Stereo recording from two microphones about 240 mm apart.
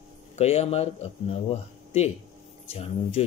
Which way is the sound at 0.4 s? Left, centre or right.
Left.